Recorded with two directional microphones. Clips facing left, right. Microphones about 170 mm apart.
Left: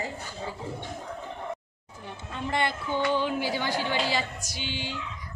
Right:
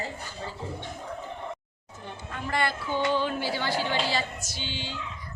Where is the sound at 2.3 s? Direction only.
20° left (ahead or behind).